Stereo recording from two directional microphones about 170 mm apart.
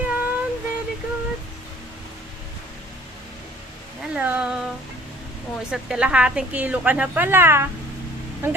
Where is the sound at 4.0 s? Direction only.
10° right (ahead or behind).